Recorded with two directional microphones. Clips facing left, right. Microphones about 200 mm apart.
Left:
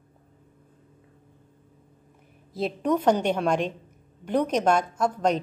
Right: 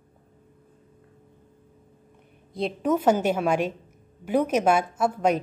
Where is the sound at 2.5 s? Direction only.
Centre (ahead or behind).